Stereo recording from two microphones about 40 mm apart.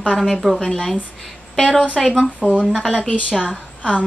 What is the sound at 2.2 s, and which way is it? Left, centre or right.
Speech, right.